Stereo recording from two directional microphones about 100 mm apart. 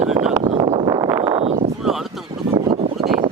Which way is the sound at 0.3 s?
65° right (ahead or behind).